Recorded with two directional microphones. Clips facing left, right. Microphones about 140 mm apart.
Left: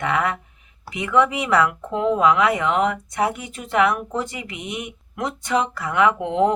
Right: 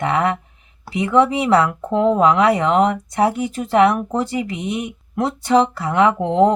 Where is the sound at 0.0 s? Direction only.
30° right (ahead or behind).